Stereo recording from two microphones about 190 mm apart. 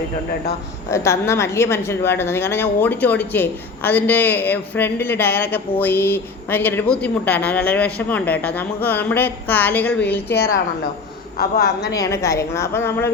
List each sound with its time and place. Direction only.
0.9 s speech: 15° left (ahead or behind)
10.3 s a woman's voice: 55° left (ahead or behind)
11.9 s speech: 15° left (ahead or behind)